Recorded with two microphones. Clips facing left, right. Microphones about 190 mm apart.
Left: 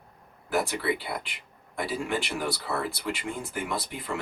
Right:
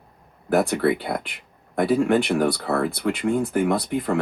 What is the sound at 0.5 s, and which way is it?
Speech, 55° right (ahead or behind).